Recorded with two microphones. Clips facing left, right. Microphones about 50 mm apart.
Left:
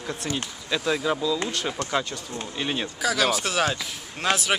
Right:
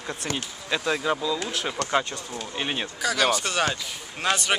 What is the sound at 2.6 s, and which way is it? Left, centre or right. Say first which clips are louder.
Speech: left 1 dB; centre.